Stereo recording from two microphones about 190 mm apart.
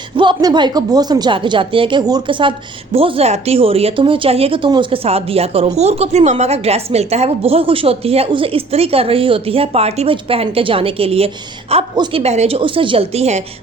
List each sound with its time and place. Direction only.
0.2 s a woman's voice: 25° right (ahead or behind)